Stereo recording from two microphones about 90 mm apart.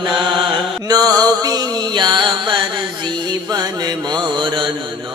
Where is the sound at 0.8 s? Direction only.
45° right (ahead or behind); by 2.6 s 60° right (ahead or behind).